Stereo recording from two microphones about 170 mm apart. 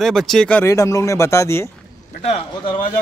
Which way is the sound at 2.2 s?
35° left (ahead or behind).